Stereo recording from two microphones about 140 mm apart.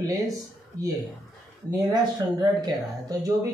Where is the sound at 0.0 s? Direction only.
25° right (ahead or behind).